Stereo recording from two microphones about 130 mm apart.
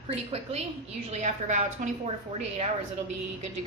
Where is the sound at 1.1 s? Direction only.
65° right (ahead or behind).